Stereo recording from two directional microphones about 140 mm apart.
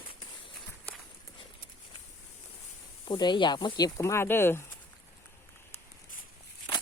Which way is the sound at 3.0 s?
30° left (ahead or behind).